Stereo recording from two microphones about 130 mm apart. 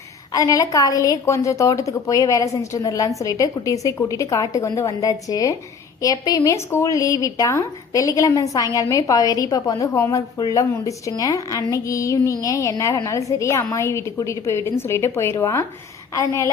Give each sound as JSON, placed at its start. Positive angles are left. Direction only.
{"t": 0.3, "sound": "a woman's voice", "side_deg": 25}